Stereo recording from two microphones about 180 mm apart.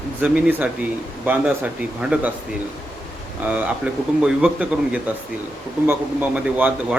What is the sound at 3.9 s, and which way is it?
Speech, 5° right (ahead or behind).